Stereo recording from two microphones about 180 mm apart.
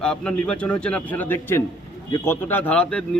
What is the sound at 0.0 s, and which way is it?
A man's voice, 5° left (ahead or behind).